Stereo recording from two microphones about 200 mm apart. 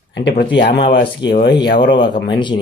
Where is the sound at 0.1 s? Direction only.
55° left (ahead or behind).